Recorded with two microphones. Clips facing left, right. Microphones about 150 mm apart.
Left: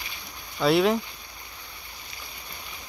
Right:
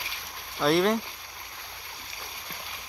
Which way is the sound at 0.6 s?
Centre (ahead or behind).